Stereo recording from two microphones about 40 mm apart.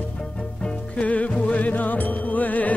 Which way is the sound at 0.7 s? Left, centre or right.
Left.